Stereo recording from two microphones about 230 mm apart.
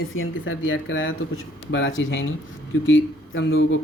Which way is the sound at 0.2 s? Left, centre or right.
Left.